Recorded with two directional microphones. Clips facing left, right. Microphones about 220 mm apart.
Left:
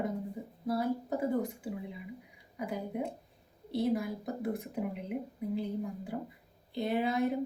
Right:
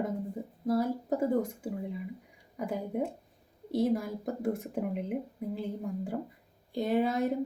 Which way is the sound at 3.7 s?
45° right (ahead or behind).